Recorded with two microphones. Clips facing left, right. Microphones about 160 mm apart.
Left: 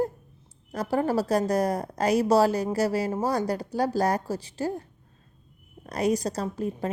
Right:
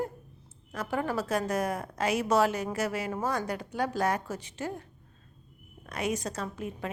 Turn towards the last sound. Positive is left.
turn(degrees=35)  # may be behind; listen again after turning